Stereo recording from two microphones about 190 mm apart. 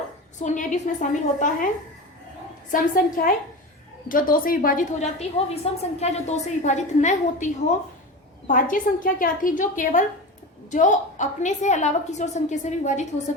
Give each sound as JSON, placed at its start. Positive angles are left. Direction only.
{"t": 0.3, "sound": "a woman's voice", "side_deg": 40}
{"t": 2.7, "sound": "a woman's voice", "side_deg": 45}
{"t": 5.7, "sound": "a woman's voice", "side_deg": 30}